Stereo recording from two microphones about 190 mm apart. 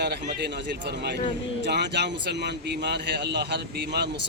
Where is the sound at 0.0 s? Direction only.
60° right (ahead or behind).